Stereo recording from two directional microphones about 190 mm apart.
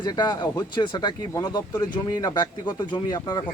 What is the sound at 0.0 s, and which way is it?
Speech, 20° left (ahead or behind).